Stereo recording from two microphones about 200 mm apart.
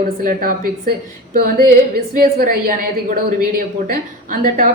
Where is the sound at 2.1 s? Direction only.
45° right (ahead or behind).